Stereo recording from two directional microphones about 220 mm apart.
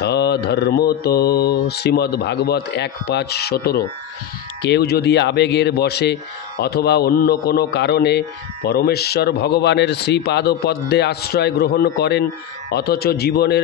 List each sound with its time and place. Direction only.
0.0 s mantra: 50° left (ahead or behind)